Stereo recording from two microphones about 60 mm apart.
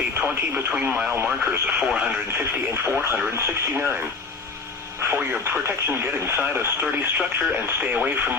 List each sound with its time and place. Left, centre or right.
0.2 s speech: right
2.4 s speech: right
5.5 s speech: right
7.2 s speech: right